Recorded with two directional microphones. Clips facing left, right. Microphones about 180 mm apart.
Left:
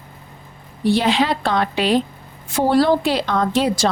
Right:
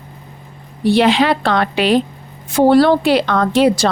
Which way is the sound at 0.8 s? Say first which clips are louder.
Right 4 dB; 75° right (ahead or behind).